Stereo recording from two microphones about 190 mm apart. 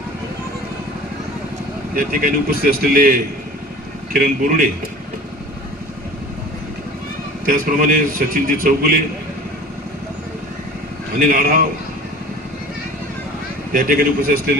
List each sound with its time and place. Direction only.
2.0 s a man's voice: 50° right (ahead or behind)
4.2 s a man's voice: 45° right (ahead or behind)
7.4 s a man's voice: 45° right (ahead or behind)
11.2 s a man's voice: 50° right (ahead or behind)
13.7 s a man's voice: 50° right (ahead or behind)